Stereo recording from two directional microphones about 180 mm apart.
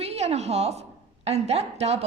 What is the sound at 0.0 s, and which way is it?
A woman's voice, 35° right (ahead or behind).